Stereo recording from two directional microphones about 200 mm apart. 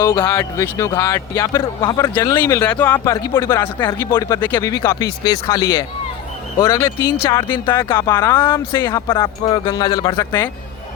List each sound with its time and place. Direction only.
0.3 s speech: 15° left (ahead or behind)